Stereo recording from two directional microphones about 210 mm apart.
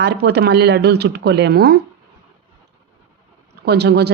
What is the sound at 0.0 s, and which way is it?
Speech, 55° right (ahead or behind).